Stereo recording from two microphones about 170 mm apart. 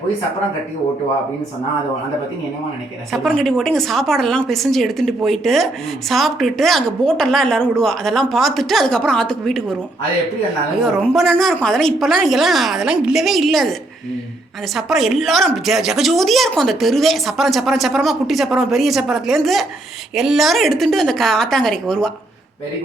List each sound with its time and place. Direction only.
3.1 s a woman's voice: centre (ahead or behind)
10.8 s a woman's voice: centre (ahead or behind)
14.8 s a woman's voice: centre (ahead or behind)